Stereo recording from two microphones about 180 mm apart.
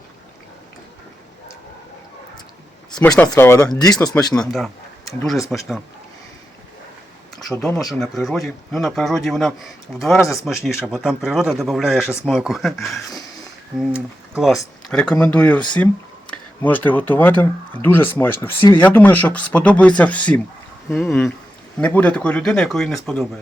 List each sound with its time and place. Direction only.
3.2 s speech: 15° left (ahead or behind)
4.4 s speech: centre (ahead or behind)
7.6 s speech: centre (ahead or behind)
18.6 s speech: 25° left (ahead or behind)
18.9 s speech: 10° left (ahead or behind)